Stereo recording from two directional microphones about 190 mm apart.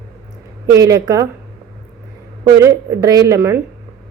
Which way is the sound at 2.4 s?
15° right (ahead or behind).